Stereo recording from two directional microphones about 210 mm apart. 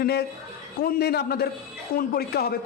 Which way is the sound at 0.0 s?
50° left (ahead or behind).